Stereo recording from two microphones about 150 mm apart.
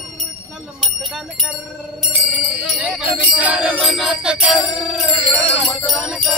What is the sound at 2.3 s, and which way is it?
Music, 10° right (ahead or behind).